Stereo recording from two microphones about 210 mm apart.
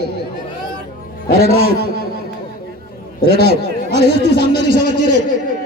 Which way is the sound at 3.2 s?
50° right (ahead or behind).